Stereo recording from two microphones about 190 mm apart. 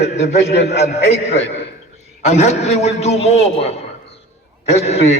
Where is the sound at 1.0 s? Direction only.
35° left (ahead or behind).